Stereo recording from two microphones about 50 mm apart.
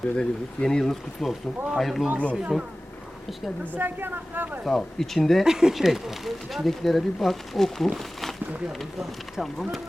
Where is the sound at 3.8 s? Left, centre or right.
Right.